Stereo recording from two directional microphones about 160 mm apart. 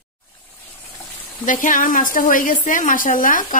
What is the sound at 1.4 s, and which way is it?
A woman's voice, 55° left (ahead or behind).